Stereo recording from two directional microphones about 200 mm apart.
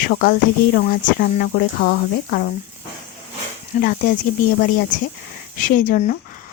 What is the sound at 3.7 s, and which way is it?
Speech, 40° left (ahead or behind).